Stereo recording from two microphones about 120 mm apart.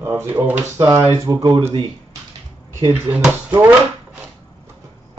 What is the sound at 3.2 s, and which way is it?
Speech, 15° right (ahead or behind).